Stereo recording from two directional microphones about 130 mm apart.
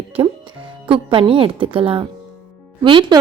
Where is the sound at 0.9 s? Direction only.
40° right (ahead or behind).